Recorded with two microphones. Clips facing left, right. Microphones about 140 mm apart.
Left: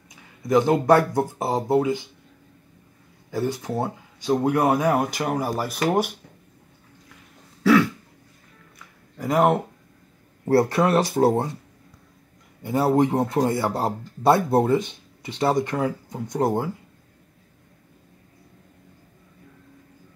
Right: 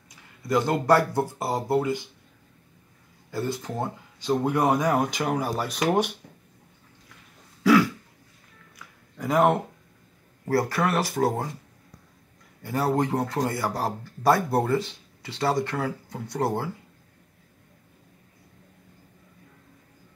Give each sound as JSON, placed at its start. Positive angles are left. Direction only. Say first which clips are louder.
{"t": 0.1, "sound": "speech", "louder": "left 5 dB", "side_deg": 15}
{"t": 3.3, "sound": "speech", "louder": "left 4 dB", "side_deg": 15}
{"t": 7.6, "sound": "throat clearing", "louder": "left 1 dB", "side_deg": 0}
{"t": 8.7, "sound": "a sound", "louder": "left 1 dB", "side_deg": 5}
{"t": 10.7, "sound": "speech", "louder": "left 5 dB", "side_deg": 25}
{"t": 12.6, "sound": "speech", "louder": "left 5 dB", "side_deg": 20}